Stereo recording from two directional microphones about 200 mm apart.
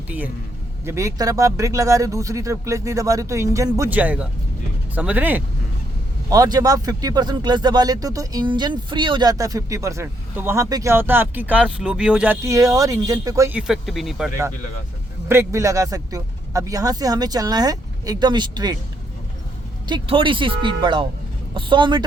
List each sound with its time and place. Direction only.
0.9 s speech: 15° right (ahead or behind)
15.3 s speech: 15° right (ahead or behind)
19.9 s speech: 25° right (ahead or behind)